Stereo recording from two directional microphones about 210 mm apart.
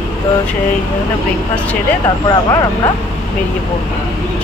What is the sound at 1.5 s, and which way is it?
Speech, 5° left (ahead or behind).